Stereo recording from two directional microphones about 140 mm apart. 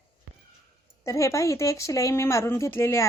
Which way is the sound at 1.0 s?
20° left (ahead or behind).